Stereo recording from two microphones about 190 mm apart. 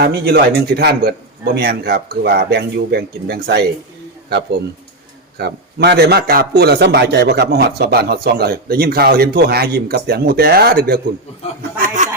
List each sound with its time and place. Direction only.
0.0 s a man's voice: 60° right (ahead or behind)
5.4 s a man's voice: 60° right (ahead or behind)
12.0 s a sound: 40° right (ahead or behind)